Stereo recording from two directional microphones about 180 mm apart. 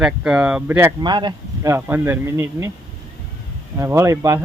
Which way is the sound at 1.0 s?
25° right (ahead or behind).